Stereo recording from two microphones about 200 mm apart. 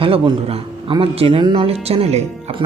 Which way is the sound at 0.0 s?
25° right (ahead or behind).